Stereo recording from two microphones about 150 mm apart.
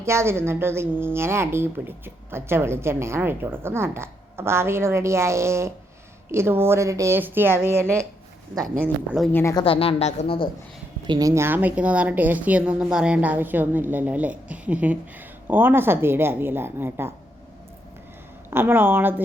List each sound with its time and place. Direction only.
0.0 s a woman's voice: 15° right (ahead or behind)
8.5 s speech: 5° left (ahead or behind)
8.8 s a woman's voice: 10° right (ahead or behind)
9.3 s a woman's voice: 15° left (ahead or behind)
9.6 s a woman's voice: 40° left (ahead or behind)
11.0 s a woman's voice: 25° right (ahead or behind)
18.5 s a woman's voice: 15° right (ahead or behind)